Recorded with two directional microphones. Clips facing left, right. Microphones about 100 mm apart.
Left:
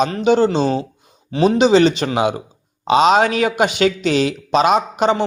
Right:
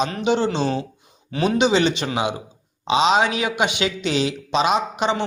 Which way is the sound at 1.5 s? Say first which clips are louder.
Left 5 dB; 40° left (ahead or behind).